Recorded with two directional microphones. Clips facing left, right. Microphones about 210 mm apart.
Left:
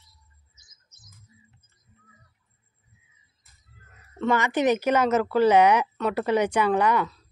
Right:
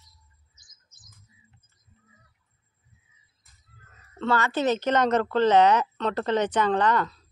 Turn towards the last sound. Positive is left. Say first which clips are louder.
# left 1 dB
turn(degrees=10)  # may be behind; listen again after turning